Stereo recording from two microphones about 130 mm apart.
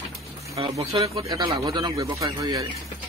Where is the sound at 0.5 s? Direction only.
50° right (ahead or behind).